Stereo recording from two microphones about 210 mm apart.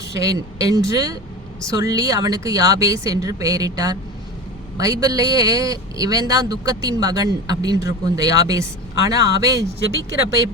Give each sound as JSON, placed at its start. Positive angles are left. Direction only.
{"t": 0.1, "sound": "a man's voice", "side_deg": -15}